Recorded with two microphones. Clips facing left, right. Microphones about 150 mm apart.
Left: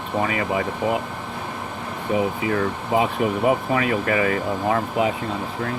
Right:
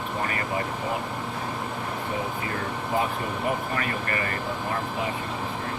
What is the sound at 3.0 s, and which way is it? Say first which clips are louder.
Speech: left 8 dB; 90° left.